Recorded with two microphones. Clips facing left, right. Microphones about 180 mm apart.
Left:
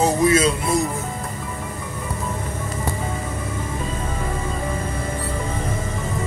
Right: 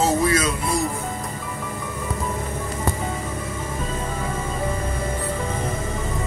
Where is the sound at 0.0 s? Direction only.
20° left (ahead or behind).